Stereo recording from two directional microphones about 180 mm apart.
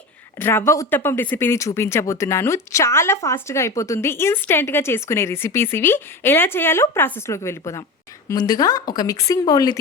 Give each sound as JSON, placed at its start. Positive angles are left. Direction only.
{"t": 0.3, "sound": "speech", "side_deg": 15}